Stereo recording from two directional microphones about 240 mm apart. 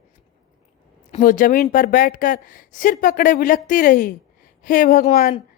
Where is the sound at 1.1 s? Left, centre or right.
Left.